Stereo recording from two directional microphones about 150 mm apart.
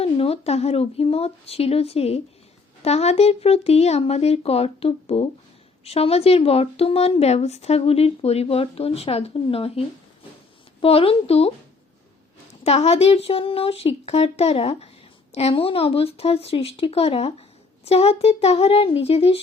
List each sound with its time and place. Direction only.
0.0 s speech: 40° left (ahead or behind)
12.6 s speech: 45° left (ahead or behind)